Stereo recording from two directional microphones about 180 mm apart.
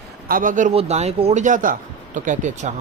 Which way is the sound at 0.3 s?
50° right (ahead or behind).